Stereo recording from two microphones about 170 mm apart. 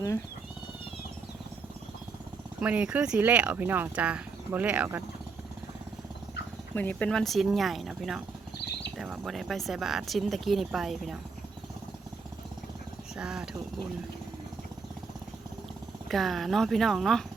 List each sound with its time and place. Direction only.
2.6 s speech: 5° right (ahead or behind)
6.7 s speech: 10° left (ahead or behind)
13.1 s speech: 5° right (ahead or behind)
16.0 s speech: centre (ahead or behind)